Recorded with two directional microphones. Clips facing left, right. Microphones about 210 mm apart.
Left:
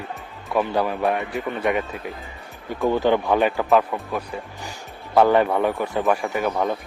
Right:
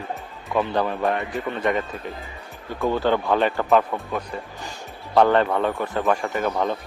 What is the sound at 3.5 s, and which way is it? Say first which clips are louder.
Speech: even; centre (ahead or behind).